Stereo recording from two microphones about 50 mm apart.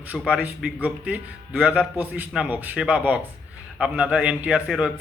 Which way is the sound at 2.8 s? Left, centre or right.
Right.